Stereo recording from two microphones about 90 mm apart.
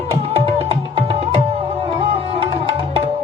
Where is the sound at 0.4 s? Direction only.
90° right.